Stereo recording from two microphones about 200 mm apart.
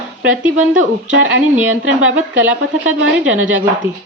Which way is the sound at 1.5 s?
10° right (ahead or behind).